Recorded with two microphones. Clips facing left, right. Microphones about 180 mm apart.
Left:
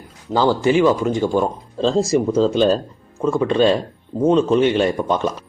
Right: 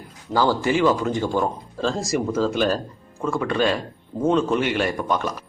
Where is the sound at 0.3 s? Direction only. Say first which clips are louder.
Left 4 dB; 15° left (ahead or behind).